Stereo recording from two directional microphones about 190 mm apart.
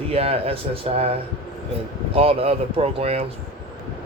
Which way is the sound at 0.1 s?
30° right (ahead or behind).